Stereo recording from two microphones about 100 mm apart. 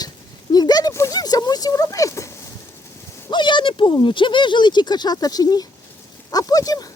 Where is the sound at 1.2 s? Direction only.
40° left (ahead or behind).